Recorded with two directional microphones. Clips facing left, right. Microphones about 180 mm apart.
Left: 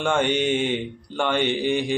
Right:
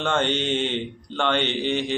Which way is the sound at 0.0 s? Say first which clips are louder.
Left 2 dB; 10° left (ahead or behind).